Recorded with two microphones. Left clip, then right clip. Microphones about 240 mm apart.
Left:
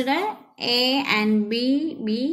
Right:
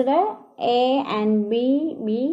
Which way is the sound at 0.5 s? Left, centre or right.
Left.